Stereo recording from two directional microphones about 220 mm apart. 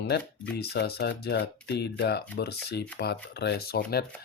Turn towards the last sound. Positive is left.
turn(degrees=45)  # may be behind; listen again after turning